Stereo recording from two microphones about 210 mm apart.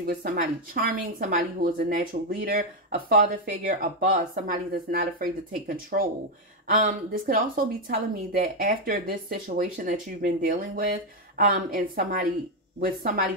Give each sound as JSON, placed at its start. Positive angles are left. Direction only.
{"t": 0.7, "sound": "a woman's voice", "side_deg": -40}